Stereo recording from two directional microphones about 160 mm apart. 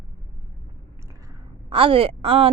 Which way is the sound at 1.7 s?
35° right (ahead or behind).